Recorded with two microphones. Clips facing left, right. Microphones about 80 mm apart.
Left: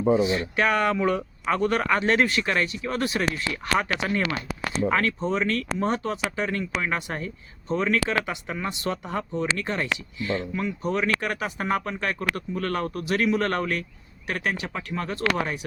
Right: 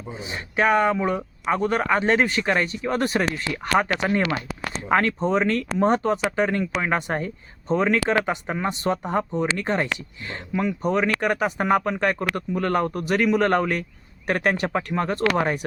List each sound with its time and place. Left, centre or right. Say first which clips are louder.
0.2 s speech: left 1 dB; right
10.5 s speech: right 4 dB; right
10.8 s speech: right 3 dB; right
11.3 s speech: right 6 dB; right
13.1 s speech: right 1 dB; right
13.3 s speech: right 5 dB; right
14.3 s speech: right 6 dB; right